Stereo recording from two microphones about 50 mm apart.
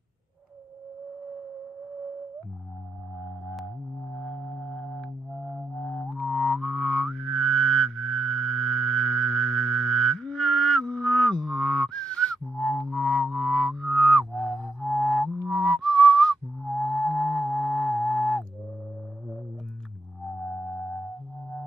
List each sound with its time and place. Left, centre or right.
3.6 s music: centre
5.3 s music: centre
5.8 s music: centre
20.2 s music: centre